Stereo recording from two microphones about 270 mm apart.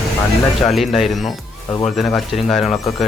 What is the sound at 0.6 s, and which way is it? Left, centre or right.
Speech, centre.